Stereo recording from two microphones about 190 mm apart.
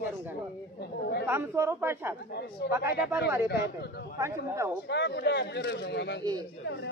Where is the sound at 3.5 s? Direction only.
60° left (ahead or behind).